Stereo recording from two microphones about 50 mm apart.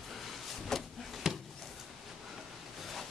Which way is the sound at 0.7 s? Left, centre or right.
Centre.